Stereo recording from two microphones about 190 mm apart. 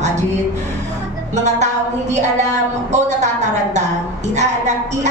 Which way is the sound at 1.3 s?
40° right (ahead or behind).